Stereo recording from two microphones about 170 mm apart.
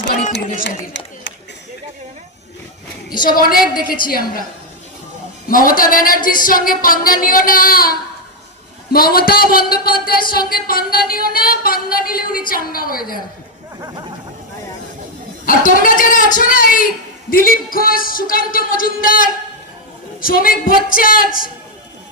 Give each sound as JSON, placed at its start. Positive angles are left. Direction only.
{"t": 0.5, "sound": "speech", "side_deg": 50}
{"t": 3.2, "sound": "singing", "side_deg": 60}
{"t": 5.5, "sound": "singing", "side_deg": 55}
{"t": 15.4, "sound": "speech", "side_deg": 55}
{"t": 17.2, "sound": "singing", "side_deg": 55}